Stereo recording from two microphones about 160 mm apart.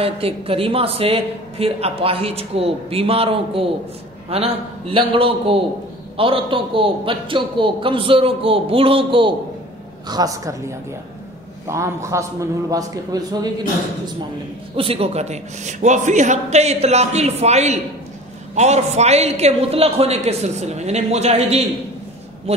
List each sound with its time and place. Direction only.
0.0 s a man's voice: 35° right (ahead or behind)
11.6 s a man's voice: 20° right (ahead or behind)
14.8 s a man's voice: 35° right (ahead or behind)